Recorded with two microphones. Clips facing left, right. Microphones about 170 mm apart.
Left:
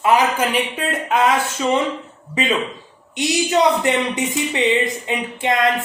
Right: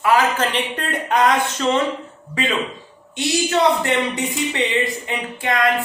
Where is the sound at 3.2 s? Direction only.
15° left (ahead or behind).